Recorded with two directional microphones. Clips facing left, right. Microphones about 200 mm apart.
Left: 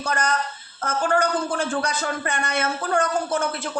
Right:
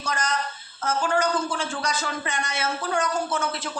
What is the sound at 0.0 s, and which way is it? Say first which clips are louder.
Speech: left 3 dB; 55° left (ahead or behind).